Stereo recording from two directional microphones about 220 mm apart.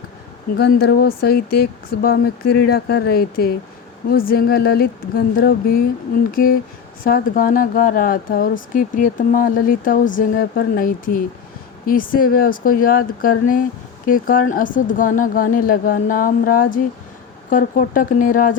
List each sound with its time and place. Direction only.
0.5 s speech: 45° left (ahead or behind)
7.0 s speech: 40° left (ahead or behind)